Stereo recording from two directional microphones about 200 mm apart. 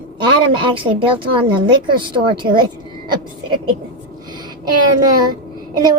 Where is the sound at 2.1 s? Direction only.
25° right (ahead or behind).